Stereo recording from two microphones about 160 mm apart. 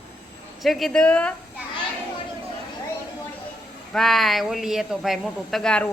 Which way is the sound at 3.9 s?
Centre (ahead or behind).